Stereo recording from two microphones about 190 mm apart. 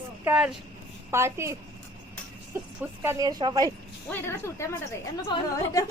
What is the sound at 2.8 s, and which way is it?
Speech, 10° right (ahead or behind).